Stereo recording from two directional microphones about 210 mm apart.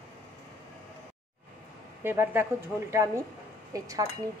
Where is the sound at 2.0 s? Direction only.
10° right (ahead or behind).